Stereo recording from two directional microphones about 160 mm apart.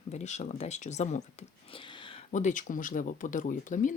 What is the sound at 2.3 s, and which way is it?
Speech, 50° left (ahead or behind).